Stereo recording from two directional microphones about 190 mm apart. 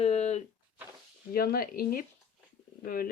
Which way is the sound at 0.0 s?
35° left (ahead or behind).